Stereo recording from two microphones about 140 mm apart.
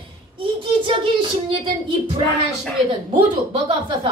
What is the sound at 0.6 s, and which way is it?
Speech, 35° right (ahead or behind).